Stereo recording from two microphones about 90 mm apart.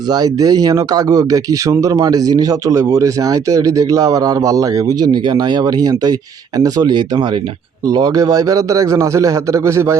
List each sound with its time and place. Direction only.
0.1 s speech: 50° right (ahead or behind)
7.9 s a man's voice: 45° right (ahead or behind)